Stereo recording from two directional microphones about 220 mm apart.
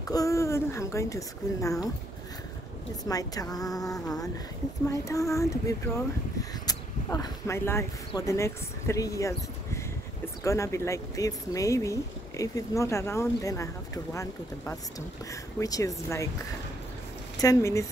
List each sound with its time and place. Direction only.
0.1 s speech: 15° left (ahead or behind)
3.1 s speech: 15° left (ahead or behind)
17.4 s speech: 15° left (ahead or behind)